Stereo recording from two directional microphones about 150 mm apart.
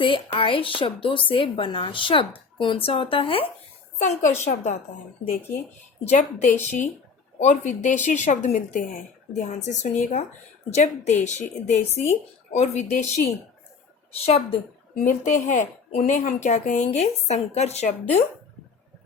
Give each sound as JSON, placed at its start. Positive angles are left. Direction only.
{"t": 0.0, "sound": "a woman's voice", "side_deg": 35}
{"t": 3.9, "sound": "a woman's voice", "side_deg": 50}
{"t": 6.1, "sound": "a woman's voice", "side_deg": 55}
{"t": 14.2, "sound": "a woman's voice", "side_deg": 40}
{"t": 15.0, "sound": "a woman's voice", "side_deg": 55}